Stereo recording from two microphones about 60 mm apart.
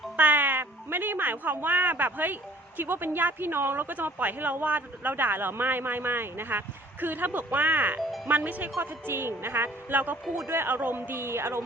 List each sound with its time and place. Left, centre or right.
0.2 s speech: right
8.8 s speech: right